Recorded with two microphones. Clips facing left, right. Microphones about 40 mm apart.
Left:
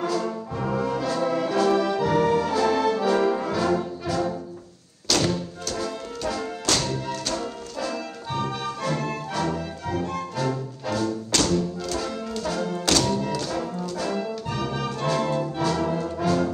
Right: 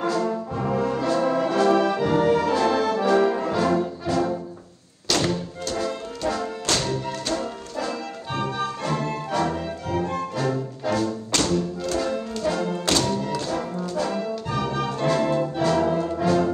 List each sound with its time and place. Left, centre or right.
0.0 s music: right
0.7 s brass instrument: right
3.3 s music: centre
3.5 s music: right